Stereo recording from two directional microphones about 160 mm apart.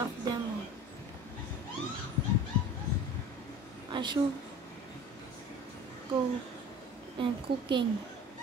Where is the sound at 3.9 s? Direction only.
30° right (ahead or behind).